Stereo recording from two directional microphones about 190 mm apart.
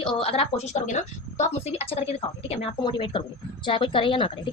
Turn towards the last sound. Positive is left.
turn(degrees=30)  # may be behind; listen again after turning